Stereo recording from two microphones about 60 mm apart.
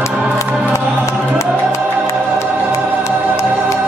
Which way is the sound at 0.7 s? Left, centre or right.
Left.